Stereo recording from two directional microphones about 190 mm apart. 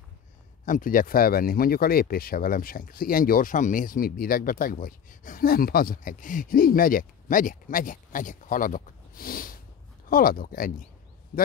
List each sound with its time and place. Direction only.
0.7 s speech: 45° left (ahead or behind)